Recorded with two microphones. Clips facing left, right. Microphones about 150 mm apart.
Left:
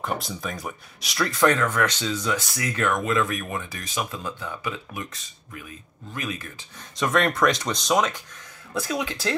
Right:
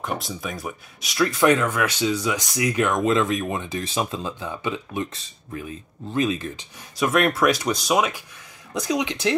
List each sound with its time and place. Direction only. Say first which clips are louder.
0.0 s speech: even; centre (ahead or behind)
1.4 s speech: right 1 dB; 15° right (ahead or behind)
7.0 s speech: right 2 dB; 5° right (ahead or behind)